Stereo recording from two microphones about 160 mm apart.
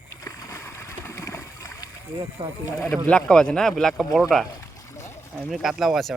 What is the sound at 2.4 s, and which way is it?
Speech, 30° right (ahead or behind).